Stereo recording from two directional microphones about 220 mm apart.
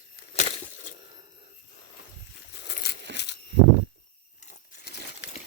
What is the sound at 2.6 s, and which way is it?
Crumpling, 50° left (ahead or behind).